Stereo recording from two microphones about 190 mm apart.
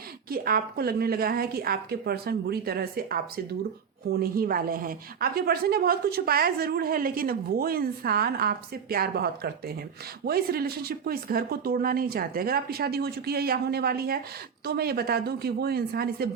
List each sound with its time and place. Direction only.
0.3 s a woman's voice: 50° right (ahead or behind)